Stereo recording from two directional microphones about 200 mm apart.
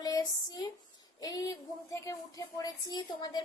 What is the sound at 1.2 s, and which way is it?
A woman's voice, 20° left (ahead or behind).